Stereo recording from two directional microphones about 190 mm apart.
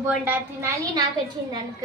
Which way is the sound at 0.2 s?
10° right (ahead or behind).